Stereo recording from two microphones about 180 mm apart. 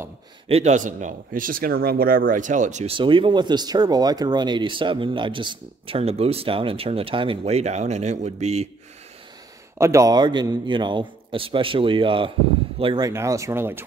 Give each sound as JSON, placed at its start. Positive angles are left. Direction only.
{"t": 0.5, "sound": "speech", "side_deg": -40}
{"t": 3.0, "sound": "speech", "side_deg": -25}
{"t": 9.8, "sound": "speech", "side_deg": -15}
{"t": 13.1, "sound": "speech", "side_deg": -15}